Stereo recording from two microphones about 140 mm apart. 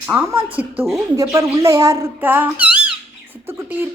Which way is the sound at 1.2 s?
25° right (ahead or behind).